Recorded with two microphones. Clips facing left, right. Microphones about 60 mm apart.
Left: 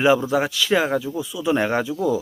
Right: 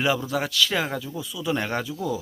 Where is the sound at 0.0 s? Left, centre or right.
Left.